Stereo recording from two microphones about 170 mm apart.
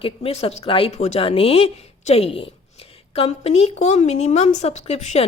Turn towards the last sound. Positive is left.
turn(degrees=40)  # may be behind; listen again after turning